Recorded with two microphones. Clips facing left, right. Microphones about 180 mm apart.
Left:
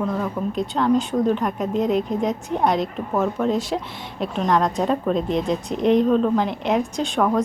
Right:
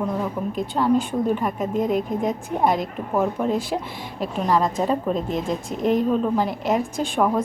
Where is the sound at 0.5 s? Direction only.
55° right (ahead or behind).